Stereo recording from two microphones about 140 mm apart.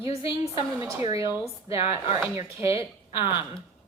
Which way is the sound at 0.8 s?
25° right (ahead or behind).